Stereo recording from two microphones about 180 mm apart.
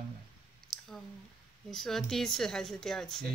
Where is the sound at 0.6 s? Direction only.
Centre (ahead or behind).